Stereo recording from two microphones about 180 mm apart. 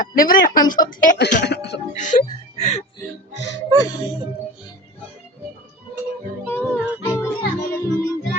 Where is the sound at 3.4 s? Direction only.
75° left (ahead or behind).